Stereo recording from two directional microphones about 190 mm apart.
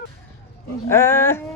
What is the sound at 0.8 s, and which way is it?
Speech, 15° left (ahead or behind).